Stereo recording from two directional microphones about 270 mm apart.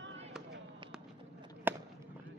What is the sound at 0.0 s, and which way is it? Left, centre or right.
Fireworks, right.